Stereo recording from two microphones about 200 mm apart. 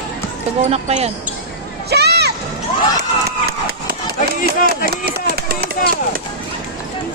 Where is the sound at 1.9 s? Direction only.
55° right (ahead or behind).